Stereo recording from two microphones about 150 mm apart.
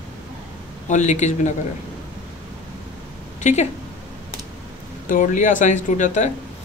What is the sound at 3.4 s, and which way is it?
Speech, 50° left (ahead or behind).